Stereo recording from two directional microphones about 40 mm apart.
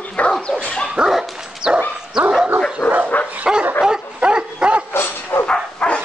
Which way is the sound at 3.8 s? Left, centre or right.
Right.